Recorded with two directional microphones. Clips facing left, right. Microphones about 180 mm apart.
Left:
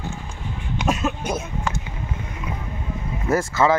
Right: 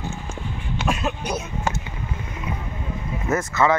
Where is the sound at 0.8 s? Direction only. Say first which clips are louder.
Left 2 dB; 45° left (ahead or behind).